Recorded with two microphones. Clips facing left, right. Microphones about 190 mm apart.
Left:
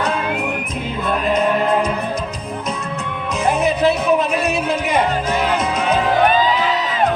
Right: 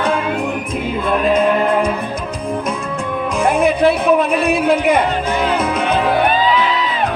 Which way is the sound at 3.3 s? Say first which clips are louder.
Right 3 dB; 55° right (ahead or behind).